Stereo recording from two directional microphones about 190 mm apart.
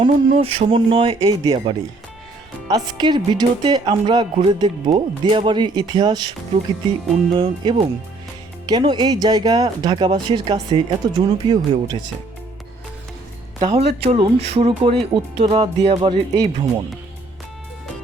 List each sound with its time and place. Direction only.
0.0 s speech: 30° right (ahead or behind)
7.3 s speech: 25° right (ahead or behind)
13.6 s speech: 25° right (ahead or behind)